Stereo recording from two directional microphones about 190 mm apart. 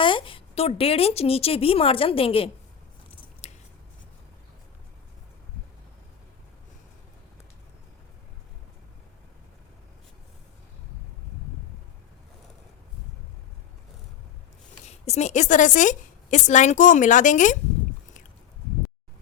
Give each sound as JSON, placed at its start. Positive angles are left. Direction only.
{"t": 0.0, "sound": "a woman's voice", "side_deg": 25}
{"t": 3.4, "sound": "scissors", "side_deg": 35}
{"t": 14.8, "sound": "a woman's voice", "side_deg": 35}